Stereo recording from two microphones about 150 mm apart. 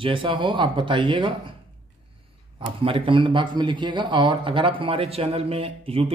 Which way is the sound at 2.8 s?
35° right (ahead or behind).